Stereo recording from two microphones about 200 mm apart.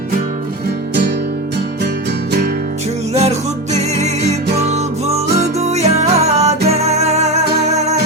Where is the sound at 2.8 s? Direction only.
35° right (ahead or behind).